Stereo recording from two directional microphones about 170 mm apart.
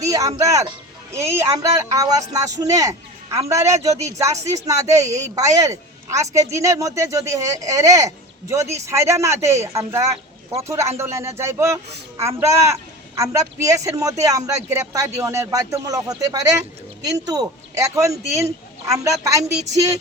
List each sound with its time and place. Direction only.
0.0 s a man's voice: 20° right (ahead or behind)